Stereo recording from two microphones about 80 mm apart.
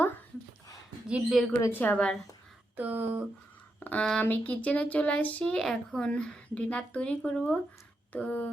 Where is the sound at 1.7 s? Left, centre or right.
Left.